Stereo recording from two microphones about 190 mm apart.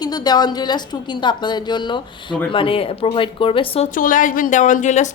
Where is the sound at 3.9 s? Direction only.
45° left (ahead or behind).